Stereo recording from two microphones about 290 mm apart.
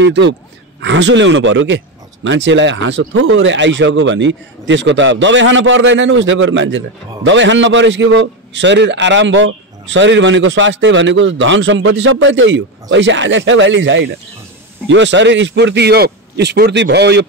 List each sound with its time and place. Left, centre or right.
0.0 s a man's voice: right